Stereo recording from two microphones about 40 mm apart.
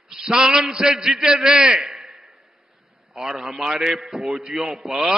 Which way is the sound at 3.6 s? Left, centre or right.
Centre.